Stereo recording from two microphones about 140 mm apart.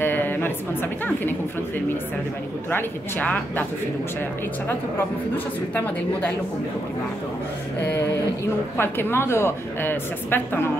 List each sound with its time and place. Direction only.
0.0 s a sound: 15° left (ahead or behind)
2.7 s speech: 10° left (ahead or behind)
8.7 s speech: 15° left (ahead or behind)